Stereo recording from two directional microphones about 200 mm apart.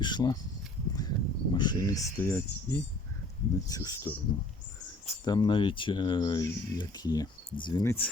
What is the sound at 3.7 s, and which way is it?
Speech, 20° left (ahead or behind).